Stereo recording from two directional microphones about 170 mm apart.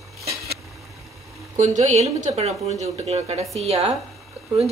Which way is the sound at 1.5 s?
45° right (ahead or behind).